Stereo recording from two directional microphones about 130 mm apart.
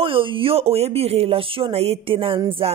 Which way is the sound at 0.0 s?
45° right (ahead or behind).